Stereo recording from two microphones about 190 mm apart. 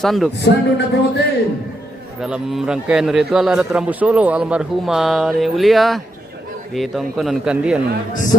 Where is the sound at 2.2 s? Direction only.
5° right (ahead or behind).